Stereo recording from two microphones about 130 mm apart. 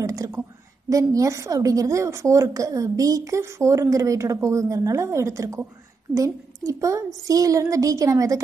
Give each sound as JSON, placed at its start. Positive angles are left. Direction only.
{"t": 0.0, "sound": "a woman's voice", "side_deg": -25}